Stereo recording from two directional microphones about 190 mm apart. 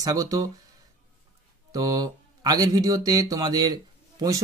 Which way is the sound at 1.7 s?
20° right (ahead or behind).